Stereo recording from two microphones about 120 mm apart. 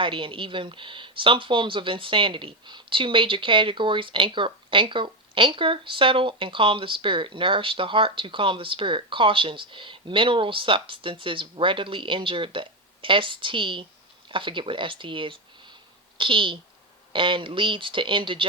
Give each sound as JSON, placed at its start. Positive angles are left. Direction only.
{"t": 0.0, "sound": "speech", "side_deg": -45}